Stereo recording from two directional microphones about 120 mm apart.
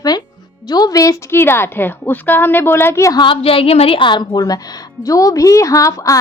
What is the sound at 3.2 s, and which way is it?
A woman's voice, 45° left (ahead or behind).